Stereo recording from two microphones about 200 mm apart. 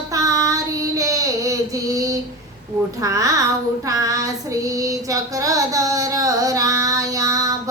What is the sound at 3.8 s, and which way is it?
Child singing, 15° right (ahead or behind).